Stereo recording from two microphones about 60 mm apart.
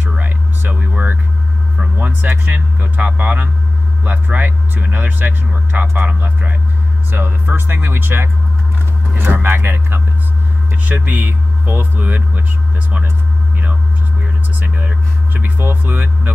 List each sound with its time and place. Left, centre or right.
0.2 s a sound: right
2.0 s speech: right
10.8 s speech: right
14.2 s speech: right